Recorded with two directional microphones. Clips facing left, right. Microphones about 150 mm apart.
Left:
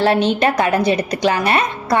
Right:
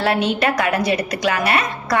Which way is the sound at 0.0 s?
30° left (ahead or behind).